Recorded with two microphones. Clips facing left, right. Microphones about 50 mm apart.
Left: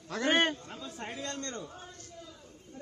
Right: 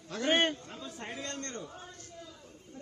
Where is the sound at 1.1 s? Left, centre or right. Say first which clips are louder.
Left 1 dB; right.